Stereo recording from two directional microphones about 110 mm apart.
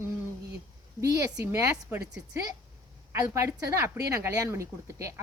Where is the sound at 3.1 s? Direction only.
25° right (ahead or behind).